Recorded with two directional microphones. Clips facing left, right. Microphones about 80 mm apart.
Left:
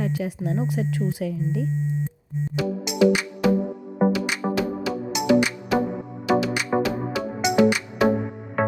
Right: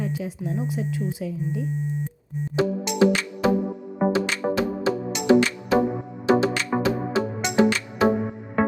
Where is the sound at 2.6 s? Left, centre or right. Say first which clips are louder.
Right 4 dB; right.